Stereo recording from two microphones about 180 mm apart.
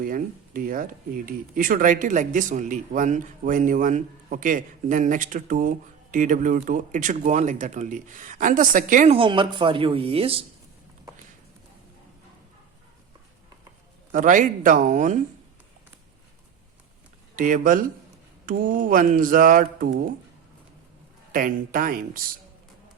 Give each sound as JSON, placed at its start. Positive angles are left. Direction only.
{"t": 0.0, "sound": "speech", "side_deg": -50}
{"t": 9.1, "sound": "speech", "side_deg": -30}
{"t": 14.1, "sound": "speech", "side_deg": -45}
{"t": 17.3, "sound": "speech", "side_deg": -45}
{"t": 21.3, "sound": "speech", "side_deg": -50}